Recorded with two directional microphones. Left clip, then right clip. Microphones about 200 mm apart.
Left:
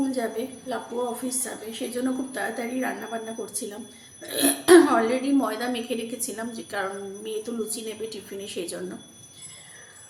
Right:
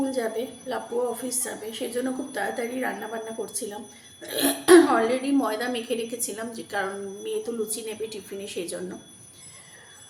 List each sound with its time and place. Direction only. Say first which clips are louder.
0.1 s a woman's voice: right 1 dB; centre (ahead or behind)